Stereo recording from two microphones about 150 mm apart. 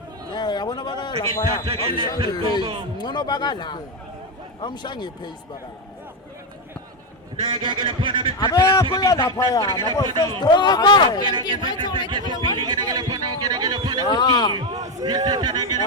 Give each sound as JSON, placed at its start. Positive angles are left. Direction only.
{"t": 0.3, "sound": "a man's voice", "side_deg": 30}
{"t": 1.6, "sound": "speech", "side_deg": -35}
{"t": 3.0, "sound": "a man's voice", "side_deg": 30}
{"t": 7.4, "sound": "speech", "side_deg": -30}
{"t": 8.4, "sound": "a man's voice", "side_deg": 30}
{"t": 11.2, "sound": "speech", "side_deg": -30}
{"t": 12.5, "sound": "a sound", "side_deg": -30}
{"t": 14.0, "sound": "a man's voice", "side_deg": 30}
{"t": 14.7, "sound": "a sound", "side_deg": -25}
{"t": 15.0, "sound": "a man's voice", "side_deg": -25}